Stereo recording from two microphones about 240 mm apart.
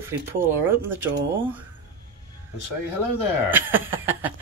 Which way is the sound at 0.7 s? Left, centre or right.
Centre.